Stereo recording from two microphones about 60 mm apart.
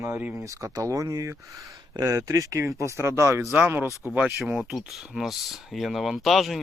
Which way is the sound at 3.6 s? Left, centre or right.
Right.